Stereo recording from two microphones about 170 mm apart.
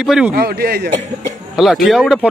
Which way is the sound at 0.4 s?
65° right (ahead or behind).